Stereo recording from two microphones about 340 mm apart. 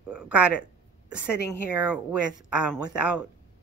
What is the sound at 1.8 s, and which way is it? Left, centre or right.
A woman's voice, centre.